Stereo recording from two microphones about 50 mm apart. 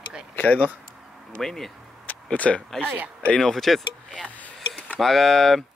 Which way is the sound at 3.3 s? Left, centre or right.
Centre.